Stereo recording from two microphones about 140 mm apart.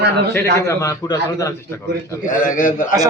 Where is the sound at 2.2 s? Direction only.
70° left (ahead or behind).